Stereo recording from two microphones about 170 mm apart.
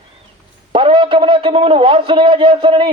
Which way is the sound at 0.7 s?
30° right (ahead or behind).